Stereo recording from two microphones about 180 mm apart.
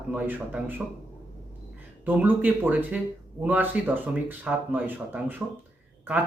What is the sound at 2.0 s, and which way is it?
Speech, 10° right (ahead or behind).